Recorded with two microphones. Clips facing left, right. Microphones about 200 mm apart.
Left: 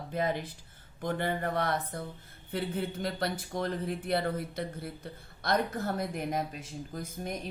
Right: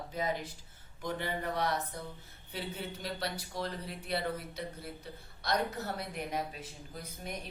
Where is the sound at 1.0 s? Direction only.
55° left (ahead or behind).